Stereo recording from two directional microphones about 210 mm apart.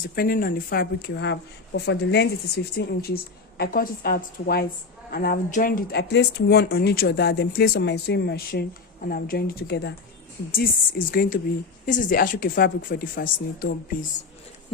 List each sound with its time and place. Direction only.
0.2 s speech: 45° left (ahead or behind)